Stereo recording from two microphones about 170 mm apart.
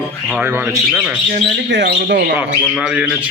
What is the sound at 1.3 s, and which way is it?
Speech, 80° right.